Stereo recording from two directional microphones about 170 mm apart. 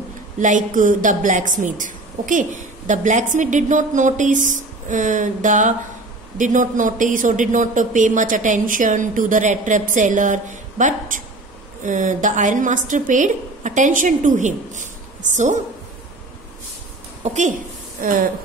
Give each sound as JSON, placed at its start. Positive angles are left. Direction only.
{"t": 0.4, "sound": "a woman's voice", "side_deg": -50}
{"t": 17.2, "sound": "a woman's voice", "side_deg": -45}